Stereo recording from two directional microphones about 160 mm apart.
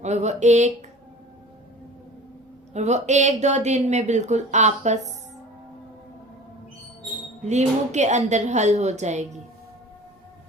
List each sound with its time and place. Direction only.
0.0 s speech: 45° right (ahead or behind)
2.7 s speech: 45° right (ahead or behind)
7.4 s speech: 45° right (ahead or behind)